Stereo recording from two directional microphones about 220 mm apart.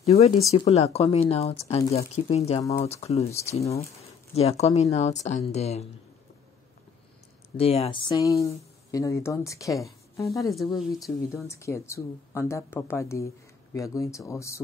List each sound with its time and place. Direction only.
0.0 s speech: 30° left (ahead or behind)
7.5 s speech: 25° left (ahead or behind)
10.5 s speech: centre (ahead or behind)
11.5 s speech: 15° left (ahead or behind)